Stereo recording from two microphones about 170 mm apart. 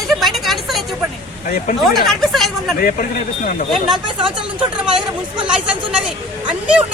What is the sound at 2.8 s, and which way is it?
Speech, 55° left (ahead or behind).